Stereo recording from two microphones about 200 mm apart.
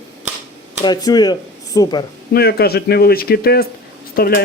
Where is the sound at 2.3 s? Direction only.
50° left (ahead or behind).